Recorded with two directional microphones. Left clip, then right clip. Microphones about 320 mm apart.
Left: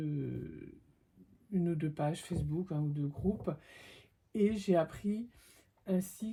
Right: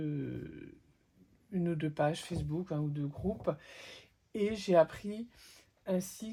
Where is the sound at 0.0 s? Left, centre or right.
Right.